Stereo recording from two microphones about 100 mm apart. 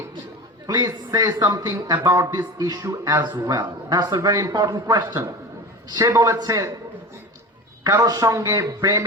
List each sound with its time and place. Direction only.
0.7 s a man's voice: 40° right (ahead or behind)
8.0 s a man's voice: 35° right (ahead or behind)